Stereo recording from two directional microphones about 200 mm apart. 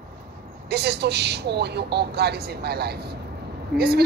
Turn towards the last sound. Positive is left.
turn(degrees=-50)  # may be behind; listen again after turning